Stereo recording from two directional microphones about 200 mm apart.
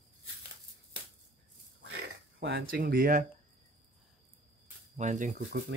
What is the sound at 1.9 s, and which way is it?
Speech, 55° right (ahead or behind).